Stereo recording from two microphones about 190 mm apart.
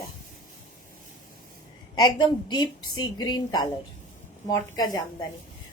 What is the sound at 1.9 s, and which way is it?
A woman's voice, 25° left (ahead or behind).